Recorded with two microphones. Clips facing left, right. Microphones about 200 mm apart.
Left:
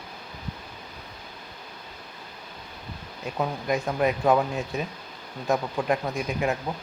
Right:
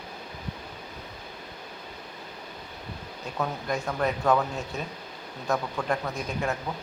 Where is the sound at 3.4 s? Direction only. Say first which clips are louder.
Left 3 dB; 15° left (ahead or behind).